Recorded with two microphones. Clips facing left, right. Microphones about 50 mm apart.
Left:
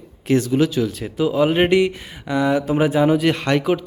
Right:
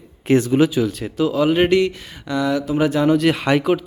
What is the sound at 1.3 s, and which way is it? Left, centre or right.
Speech, left.